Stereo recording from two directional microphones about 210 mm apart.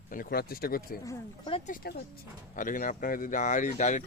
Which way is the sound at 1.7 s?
45° left (ahead or behind).